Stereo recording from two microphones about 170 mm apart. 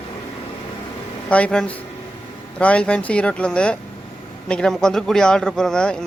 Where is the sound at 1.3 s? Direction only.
5° left (ahead or behind).